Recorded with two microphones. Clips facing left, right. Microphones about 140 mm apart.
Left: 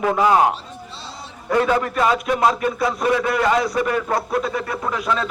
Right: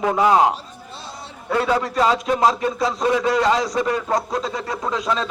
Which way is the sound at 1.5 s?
10° right (ahead or behind).